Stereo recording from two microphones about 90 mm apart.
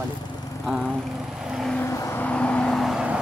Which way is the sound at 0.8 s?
10° left (ahead or behind).